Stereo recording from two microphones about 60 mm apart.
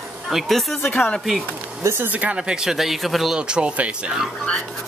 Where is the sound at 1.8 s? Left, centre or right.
Right.